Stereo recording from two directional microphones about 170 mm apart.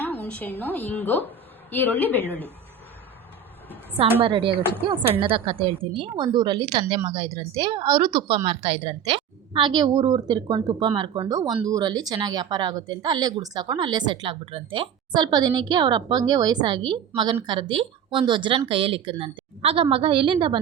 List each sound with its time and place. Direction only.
0.2 s a woman's voice: 10° left (ahead or behind)
4.2 s a woman's voice: 30° right (ahead or behind)